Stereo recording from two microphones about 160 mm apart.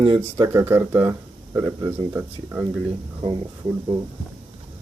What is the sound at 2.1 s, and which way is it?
Speech, 10° right (ahead or behind).